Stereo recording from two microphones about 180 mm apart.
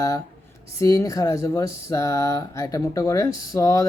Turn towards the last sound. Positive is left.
turn(degrees=20)  # may be behind; listen again after turning